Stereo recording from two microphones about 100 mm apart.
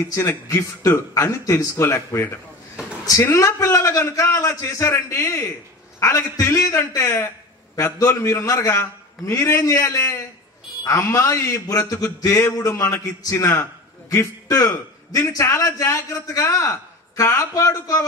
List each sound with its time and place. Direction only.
0.1 s a man's voice: 30° left (ahead or behind)